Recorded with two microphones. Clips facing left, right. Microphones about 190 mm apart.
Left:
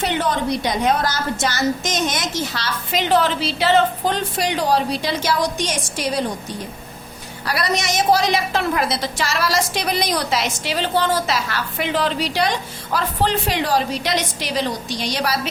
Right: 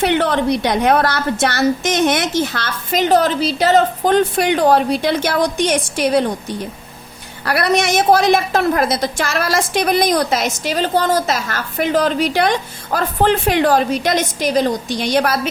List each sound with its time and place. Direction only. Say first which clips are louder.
0.0 s a woman's voice: right 5 dB; 65° right (ahead or behind)
7.4 s a woman's voice: right 6 dB; 60° right (ahead or behind)